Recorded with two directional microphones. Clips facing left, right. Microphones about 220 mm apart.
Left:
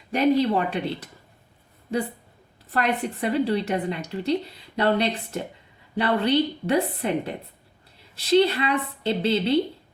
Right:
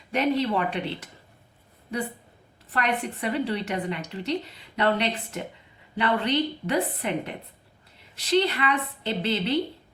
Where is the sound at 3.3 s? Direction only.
40° left (ahead or behind).